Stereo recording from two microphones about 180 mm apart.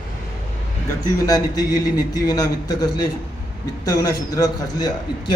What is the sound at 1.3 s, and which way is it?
A man's voice, 20° left (ahead or behind).